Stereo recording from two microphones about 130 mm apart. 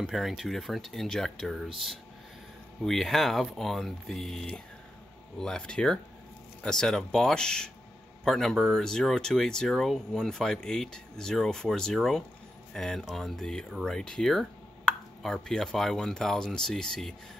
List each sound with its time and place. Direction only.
0.0 s speech: centre (ahead or behind)
2.8 s speech: centre (ahead or behind)